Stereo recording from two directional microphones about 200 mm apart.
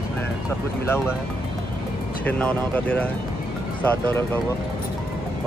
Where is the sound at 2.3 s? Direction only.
5° left (ahead or behind).